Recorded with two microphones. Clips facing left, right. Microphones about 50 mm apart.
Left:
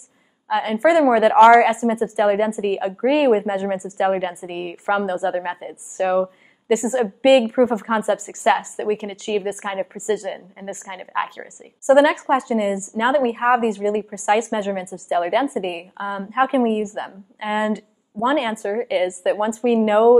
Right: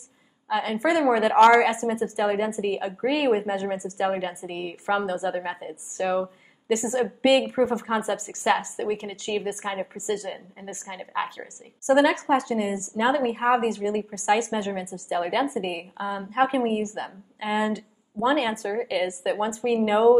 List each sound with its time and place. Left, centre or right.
0.6 s a woman's voice: centre
2.7 s a woman's voice: left
10.2 s a woman's voice: left
11.2 s a woman's voice: centre
19.6 s a woman's voice: left